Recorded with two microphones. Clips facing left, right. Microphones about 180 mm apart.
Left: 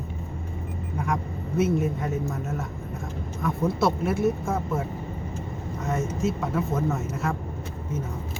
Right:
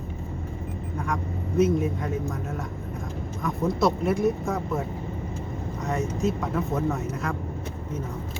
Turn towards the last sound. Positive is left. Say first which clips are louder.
# even
turn(degrees=0)  # may be behind; listen again after turning